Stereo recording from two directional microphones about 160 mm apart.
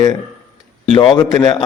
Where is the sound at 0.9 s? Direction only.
30° left (ahead or behind).